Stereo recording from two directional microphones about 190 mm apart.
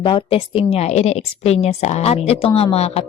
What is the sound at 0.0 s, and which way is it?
Speech, 25° left (ahead or behind).